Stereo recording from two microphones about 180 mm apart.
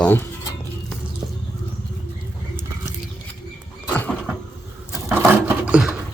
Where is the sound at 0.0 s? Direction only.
10° left (ahead or behind).